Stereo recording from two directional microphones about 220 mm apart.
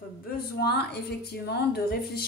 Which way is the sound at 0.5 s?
45° left (ahead or behind).